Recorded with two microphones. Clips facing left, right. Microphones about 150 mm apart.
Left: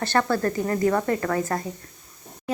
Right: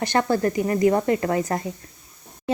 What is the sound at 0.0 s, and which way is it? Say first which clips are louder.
A woman's voice: right 2 dB; 15° right (ahead or behind).